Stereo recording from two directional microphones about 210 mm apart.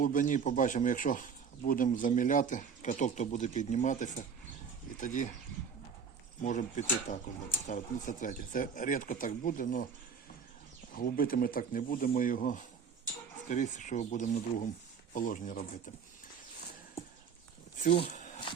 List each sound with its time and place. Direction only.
0.0 s speech: 40° left (ahead or behind)
6.4 s speech: 35° left (ahead or behind)
10.9 s speech: 45° left (ahead or behind)